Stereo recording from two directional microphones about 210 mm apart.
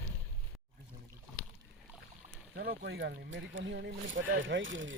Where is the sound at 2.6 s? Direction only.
50° right (ahead or behind).